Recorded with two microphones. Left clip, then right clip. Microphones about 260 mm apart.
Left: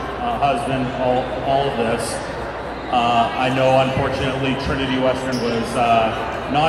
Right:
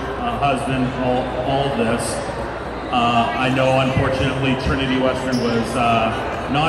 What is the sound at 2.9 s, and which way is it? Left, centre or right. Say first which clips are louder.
Speech: left 1 dB; left.